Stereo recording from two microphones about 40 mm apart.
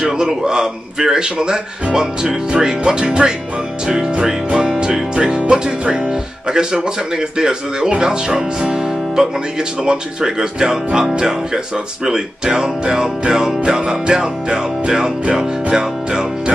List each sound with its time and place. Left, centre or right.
0.0 s speech: centre
3.8 s music: centre
5.4 s speech: right
13.7 s music: centre
15.7 s speech: centre